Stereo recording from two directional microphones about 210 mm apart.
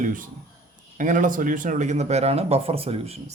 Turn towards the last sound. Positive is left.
turn(degrees=-30)  # may be behind; listen again after turning